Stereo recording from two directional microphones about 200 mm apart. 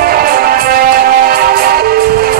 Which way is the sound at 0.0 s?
50° right (ahead or behind).